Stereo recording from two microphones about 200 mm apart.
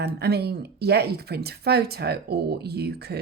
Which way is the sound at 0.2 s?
55° right (ahead or behind).